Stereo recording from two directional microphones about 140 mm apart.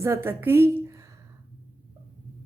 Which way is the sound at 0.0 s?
20° right (ahead or behind).